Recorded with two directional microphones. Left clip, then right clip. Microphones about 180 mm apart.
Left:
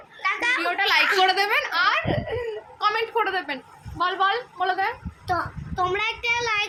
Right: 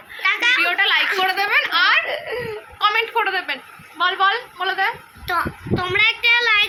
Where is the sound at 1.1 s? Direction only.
30° left (ahead or behind).